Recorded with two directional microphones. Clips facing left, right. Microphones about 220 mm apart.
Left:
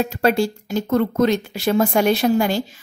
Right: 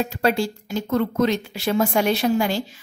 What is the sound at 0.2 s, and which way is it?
A woman's voice, 45° left (ahead or behind).